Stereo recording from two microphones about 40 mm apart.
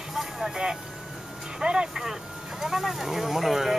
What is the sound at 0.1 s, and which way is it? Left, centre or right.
Vehicle, centre.